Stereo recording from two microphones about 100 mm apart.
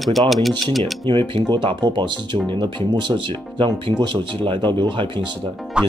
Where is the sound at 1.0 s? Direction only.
55° right (ahead or behind).